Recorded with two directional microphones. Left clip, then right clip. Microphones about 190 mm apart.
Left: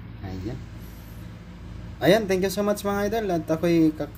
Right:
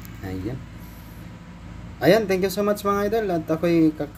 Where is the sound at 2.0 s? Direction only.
5° right (ahead or behind).